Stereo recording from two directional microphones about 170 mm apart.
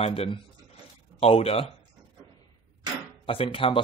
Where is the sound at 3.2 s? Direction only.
30° left (ahead or behind).